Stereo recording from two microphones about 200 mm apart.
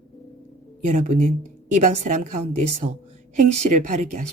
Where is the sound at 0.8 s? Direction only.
40° right (ahead or behind).